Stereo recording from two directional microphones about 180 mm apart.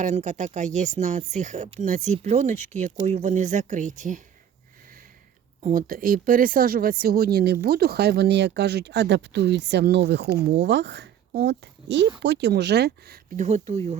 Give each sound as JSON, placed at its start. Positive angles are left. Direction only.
{"t": 0.0, "sound": "speech", "side_deg": -40}
{"t": 5.6, "sound": "a child's voice", "side_deg": -50}
{"t": 13.3, "sound": "speech", "side_deg": -40}